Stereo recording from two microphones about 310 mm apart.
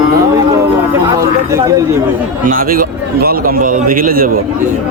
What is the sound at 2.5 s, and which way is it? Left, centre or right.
Speech, right.